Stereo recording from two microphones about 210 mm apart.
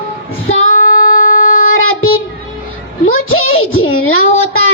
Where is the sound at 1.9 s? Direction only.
75° left (ahead or behind).